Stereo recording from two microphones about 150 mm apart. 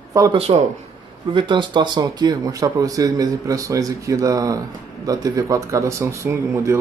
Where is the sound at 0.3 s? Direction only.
40° right (ahead or behind).